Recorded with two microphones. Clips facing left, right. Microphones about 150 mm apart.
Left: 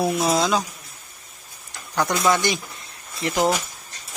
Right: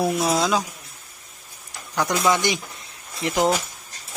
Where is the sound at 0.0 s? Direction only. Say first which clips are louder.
Left 1 dB; centre (ahead or behind).